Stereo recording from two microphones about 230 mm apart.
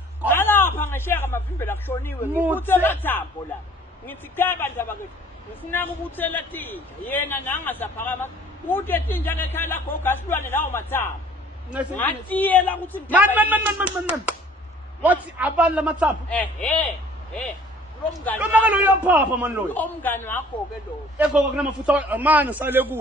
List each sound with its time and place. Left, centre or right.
0.3 s a sound: centre
2.3 s a man's voice: centre
2.6 s a man's voice: centre
13.1 s a man's voice: centre
16.3 s a man's voice: centre
18.5 s a man's voice: centre
19.7 s a man's voice: centre
21.2 s a man's voice: centre